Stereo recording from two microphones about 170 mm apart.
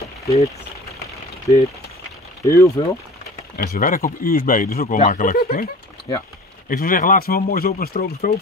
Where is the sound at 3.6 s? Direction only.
60° left (ahead or behind).